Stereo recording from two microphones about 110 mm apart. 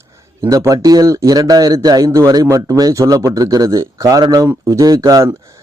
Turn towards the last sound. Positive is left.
turn(degrees=-30)  # may be behind; listen again after turning